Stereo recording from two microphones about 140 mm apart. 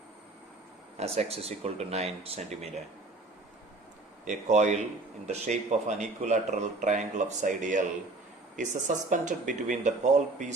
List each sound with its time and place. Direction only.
0.9 s speech: 45° right (ahead or behind)
4.3 s speech: 55° right (ahead or behind)